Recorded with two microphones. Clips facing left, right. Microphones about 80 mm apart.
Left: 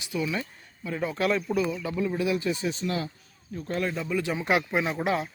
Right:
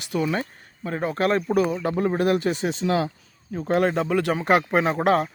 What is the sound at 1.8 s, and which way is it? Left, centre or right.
Speech, right.